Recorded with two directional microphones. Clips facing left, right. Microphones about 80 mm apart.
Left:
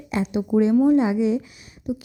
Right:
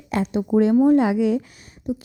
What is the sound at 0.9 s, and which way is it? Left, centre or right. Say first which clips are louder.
Speech: right 1 dB; right.